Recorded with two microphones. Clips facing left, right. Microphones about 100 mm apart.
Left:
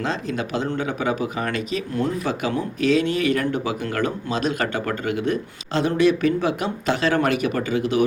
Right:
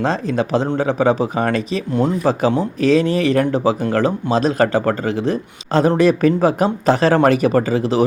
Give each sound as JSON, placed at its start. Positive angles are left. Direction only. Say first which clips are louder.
{"t": 0.0, "sound": "speech", "louder": "right 7 dB", "side_deg": -35}